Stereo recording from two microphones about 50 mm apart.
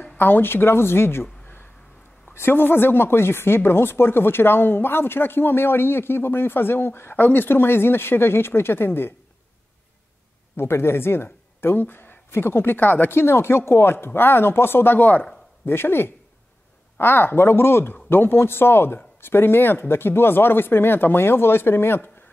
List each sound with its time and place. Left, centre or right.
0.2 s speech: left
10.5 s a woman's voice: left
15.6 s speech: left